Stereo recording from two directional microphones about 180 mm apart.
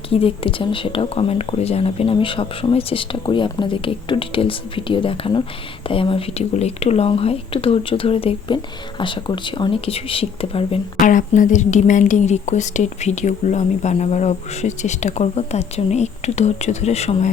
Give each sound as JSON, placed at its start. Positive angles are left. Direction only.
{"t": 0.1, "sound": "a woman's voice", "side_deg": 30}
{"t": 11.0, "sound": "a woman's voice", "side_deg": 45}